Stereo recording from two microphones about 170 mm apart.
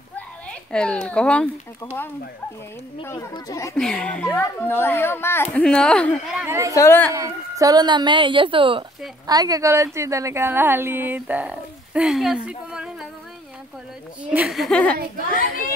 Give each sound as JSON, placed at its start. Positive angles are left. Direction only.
{"t": 0.5, "sound": "speech", "side_deg": 5}
{"t": 3.0, "sound": "a child's voice", "side_deg": 15}
{"t": 3.7, "sound": "a child's voice", "side_deg": 5}
{"t": 6.3, "sound": "speech", "side_deg": -15}
{"t": 6.7, "sound": "a woman's voice", "side_deg": 20}
{"t": 7.1, "sound": "a woman's voice", "side_deg": -20}
{"t": 14.3, "sound": "speech", "side_deg": 0}